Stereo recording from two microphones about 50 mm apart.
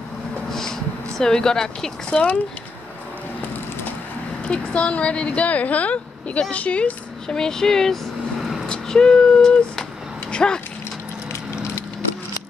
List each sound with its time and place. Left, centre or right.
0.5 s a sound: centre
2.0 s speech: left
4.5 s speech: left
7.2 s speech: centre